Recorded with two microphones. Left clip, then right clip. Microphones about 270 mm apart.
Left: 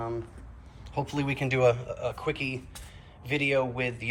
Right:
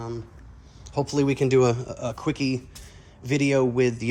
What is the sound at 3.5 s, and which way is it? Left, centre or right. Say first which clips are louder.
Speech: right 4 dB; right.